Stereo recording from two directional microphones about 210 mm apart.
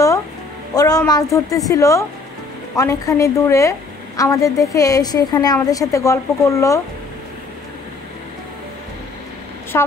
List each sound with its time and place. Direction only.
0.7 s a woman's voice: 15° left (ahead or behind)
9.7 s a woman's voice: 15° left (ahead or behind)